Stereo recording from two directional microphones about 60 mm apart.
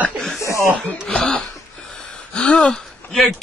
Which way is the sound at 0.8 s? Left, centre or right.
Centre.